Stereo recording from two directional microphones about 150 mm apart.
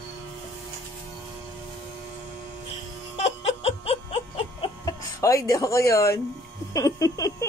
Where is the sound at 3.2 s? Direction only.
45° left (ahead or behind).